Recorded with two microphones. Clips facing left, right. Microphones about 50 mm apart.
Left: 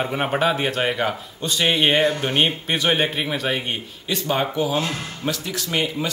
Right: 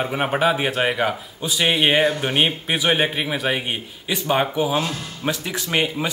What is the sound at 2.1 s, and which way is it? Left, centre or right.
Speech, centre.